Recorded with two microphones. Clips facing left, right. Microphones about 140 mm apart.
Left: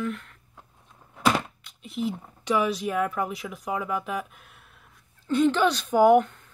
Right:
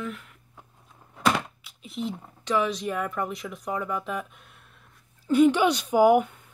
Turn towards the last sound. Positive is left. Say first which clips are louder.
# left 1 dB
turn(degrees=-10)  # may be behind; listen again after turning